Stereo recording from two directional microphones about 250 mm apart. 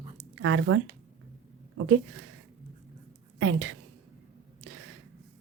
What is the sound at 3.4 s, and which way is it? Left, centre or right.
Speech, right.